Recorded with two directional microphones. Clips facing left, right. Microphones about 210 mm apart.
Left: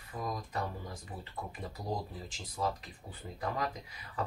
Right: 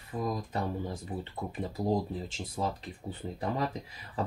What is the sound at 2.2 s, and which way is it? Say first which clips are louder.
Speech: right 2 dB; 25° right (ahead or behind).